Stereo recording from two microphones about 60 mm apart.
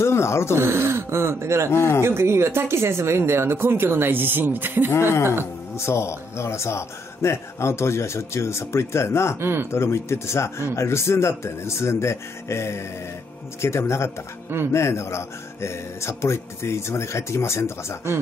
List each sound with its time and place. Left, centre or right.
0.0 s speech: left
0.6 s speech: right
1.7 s a man's voice: left
2.0 s speech: right
5.9 s a man's voice: left
9.4 s speech: right
9.7 s a man's voice: left